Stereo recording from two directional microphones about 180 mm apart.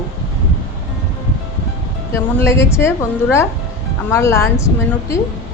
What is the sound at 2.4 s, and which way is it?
Speech, 15° left (ahead or behind).